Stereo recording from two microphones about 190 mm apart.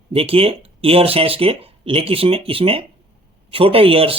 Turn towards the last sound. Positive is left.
turn(degrees=-30)  # may be behind; listen again after turning